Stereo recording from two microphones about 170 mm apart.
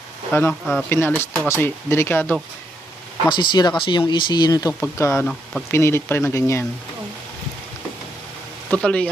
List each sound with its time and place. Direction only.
0.3 s speech: 15° left (ahead or behind)
0.6 s speech: centre (ahead or behind)
0.9 s speech: 15° left (ahead or behind)
3.2 s speech: 25° left (ahead or behind)
5.2 s speech: centre (ahead or behind)
5.7 s speech: 15° left (ahead or behind)
8.7 s speech: 5° left (ahead or behind)